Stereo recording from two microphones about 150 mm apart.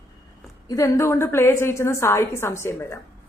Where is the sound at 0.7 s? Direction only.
20° left (ahead or behind).